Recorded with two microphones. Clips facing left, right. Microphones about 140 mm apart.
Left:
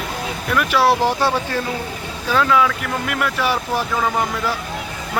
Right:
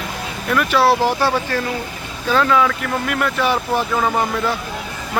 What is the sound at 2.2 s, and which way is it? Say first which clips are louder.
Speech: right 1 dB; centre (ahead or behind).